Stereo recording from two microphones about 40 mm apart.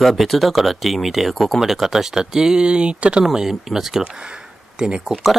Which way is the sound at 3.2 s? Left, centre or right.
Centre.